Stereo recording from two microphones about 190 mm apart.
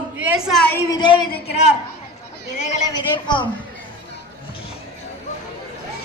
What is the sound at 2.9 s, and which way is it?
Speech, 25° left (ahead or behind).